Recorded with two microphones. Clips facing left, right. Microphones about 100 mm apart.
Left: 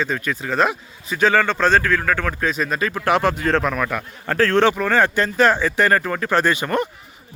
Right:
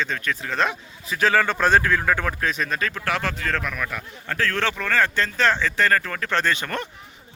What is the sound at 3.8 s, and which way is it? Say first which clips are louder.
Speech: left 6 dB; 55° left (ahead or behind).